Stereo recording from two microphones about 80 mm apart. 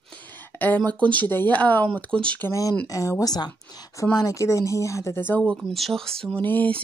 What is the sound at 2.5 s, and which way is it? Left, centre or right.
Speech, left.